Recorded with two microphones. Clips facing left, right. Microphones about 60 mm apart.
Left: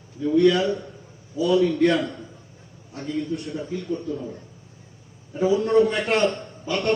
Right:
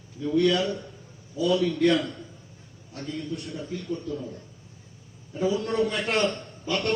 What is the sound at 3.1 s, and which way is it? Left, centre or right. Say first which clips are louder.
Speech: left 6 dB; left.